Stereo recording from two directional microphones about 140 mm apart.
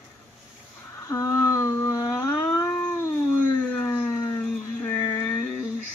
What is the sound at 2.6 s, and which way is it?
Cat, 15° left (ahead or behind).